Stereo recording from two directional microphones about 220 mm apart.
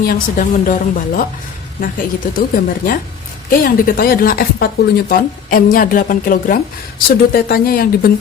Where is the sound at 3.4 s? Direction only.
40° left (ahead or behind).